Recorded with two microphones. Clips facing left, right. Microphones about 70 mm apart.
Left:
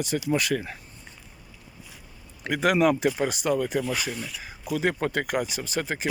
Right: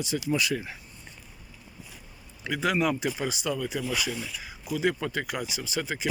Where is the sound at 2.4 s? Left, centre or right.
Left.